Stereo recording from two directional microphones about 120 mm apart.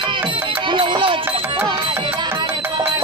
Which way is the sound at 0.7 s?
45° right (ahead or behind).